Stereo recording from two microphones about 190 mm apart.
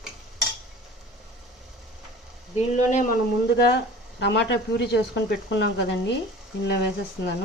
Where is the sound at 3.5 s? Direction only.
65° left (ahead or behind).